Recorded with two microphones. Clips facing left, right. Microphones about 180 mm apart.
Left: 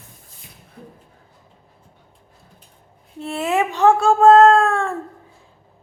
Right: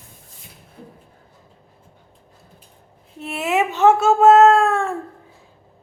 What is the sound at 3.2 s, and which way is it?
Speech, 20° right (ahead or behind).